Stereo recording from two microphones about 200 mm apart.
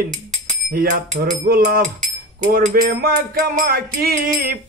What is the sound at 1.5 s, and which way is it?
Music, 45° right (ahead or behind).